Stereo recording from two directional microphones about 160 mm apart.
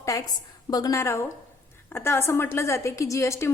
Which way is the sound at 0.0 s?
20° left (ahead or behind).